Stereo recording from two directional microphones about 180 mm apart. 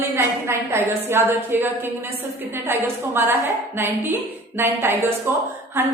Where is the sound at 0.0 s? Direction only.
15° right (ahead or behind).